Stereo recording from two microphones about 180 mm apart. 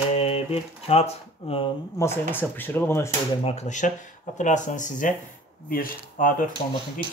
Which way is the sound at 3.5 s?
40° left (ahead or behind).